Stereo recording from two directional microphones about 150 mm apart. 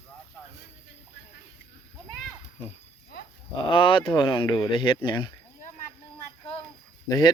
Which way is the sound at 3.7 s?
35° left (ahead or behind).